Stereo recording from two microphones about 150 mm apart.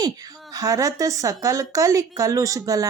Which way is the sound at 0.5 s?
25° right (ahead or behind).